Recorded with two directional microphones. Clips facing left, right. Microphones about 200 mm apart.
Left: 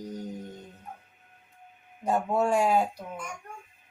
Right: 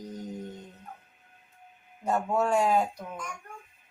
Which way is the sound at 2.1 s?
15° left (ahead or behind).